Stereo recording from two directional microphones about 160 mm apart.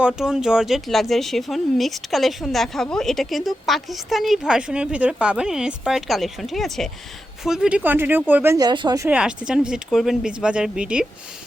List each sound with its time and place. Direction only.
0.2 s speech: 5° right (ahead or behind)
8.5 s speech: 25° right (ahead or behind)
9.0 s speech: 10° right (ahead or behind)